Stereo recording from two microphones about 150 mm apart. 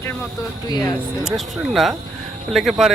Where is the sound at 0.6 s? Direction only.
25° left (ahead or behind).